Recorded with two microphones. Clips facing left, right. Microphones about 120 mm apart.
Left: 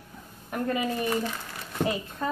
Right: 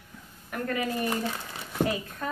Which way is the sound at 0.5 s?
20° left (ahead or behind).